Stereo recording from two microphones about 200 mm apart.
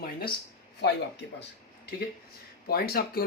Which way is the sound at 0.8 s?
60° left (ahead or behind).